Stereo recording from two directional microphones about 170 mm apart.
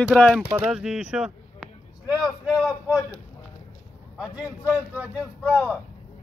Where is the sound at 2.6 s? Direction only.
5° right (ahead or behind).